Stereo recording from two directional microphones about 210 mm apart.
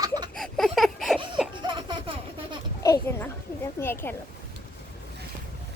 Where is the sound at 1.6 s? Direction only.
20° right (ahead or behind).